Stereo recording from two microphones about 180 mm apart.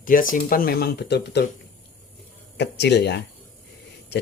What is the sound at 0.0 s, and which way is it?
Speech, 50° left (ahead or behind).